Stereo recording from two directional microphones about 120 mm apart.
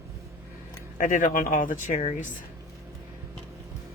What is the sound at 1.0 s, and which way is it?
Speech, 90° left.